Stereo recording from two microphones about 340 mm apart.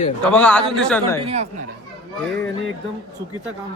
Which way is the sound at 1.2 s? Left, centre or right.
Centre.